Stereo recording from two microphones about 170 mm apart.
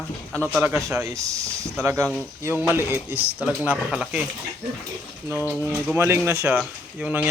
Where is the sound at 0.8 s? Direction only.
20° right (ahead or behind).